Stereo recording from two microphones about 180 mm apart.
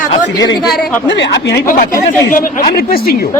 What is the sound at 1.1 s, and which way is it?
Speech, 75° left (ahead or behind).